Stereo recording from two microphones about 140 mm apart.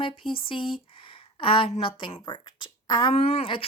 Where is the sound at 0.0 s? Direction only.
40° left (ahead or behind).